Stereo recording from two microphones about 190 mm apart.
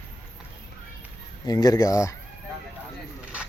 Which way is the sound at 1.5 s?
20° left (ahead or behind).